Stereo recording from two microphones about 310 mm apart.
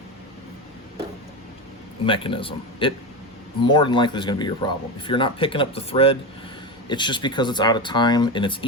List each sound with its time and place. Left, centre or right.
2.0 s a man's voice: centre